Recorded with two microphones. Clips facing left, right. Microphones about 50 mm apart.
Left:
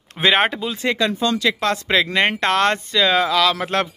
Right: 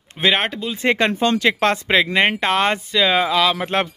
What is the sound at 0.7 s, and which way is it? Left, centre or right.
Speech, right.